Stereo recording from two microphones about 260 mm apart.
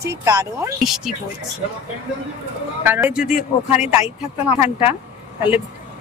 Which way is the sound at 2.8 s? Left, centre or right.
Centre.